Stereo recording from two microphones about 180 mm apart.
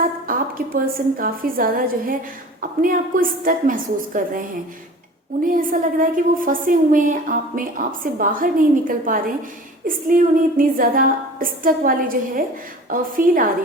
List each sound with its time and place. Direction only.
0.3 s a woman's voice: 50° right (ahead or behind)
5.5 s a woman's voice: 50° right (ahead or behind)